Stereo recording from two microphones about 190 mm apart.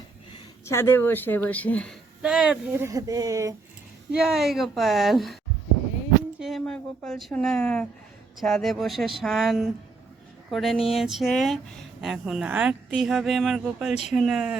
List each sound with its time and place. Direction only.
0.6 s a woman's voice: 15° left (ahead or behind)
2.2 s speech: 5° right (ahead or behind)
4.1 s speech: centre (ahead or behind)
6.4 s speech: centre (ahead or behind)